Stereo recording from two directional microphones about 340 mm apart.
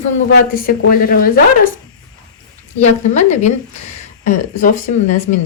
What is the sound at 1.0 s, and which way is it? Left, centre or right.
Speech, left.